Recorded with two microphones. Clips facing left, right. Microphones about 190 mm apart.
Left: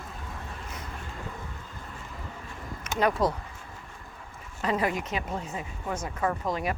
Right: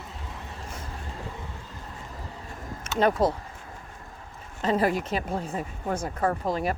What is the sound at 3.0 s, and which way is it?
Speech, 25° right (ahead or behind).